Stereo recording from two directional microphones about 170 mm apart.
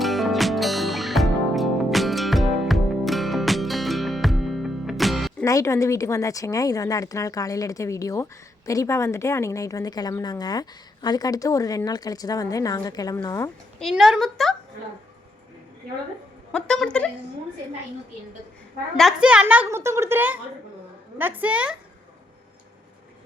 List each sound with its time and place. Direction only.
0.0 s music: centre (ahead or behind)
5.5 s a woman's voice: 20° left (ahead or behind)
13.7 s speech: centre (ahead or behind)
16.5 s speech: 5° left (ahead or behind)
18.9 s a woman's voice: 5° right (ahead or behind)